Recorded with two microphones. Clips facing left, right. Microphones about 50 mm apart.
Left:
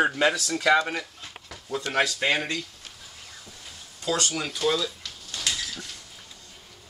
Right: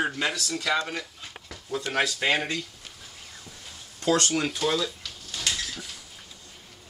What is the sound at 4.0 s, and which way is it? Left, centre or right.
Speech, right.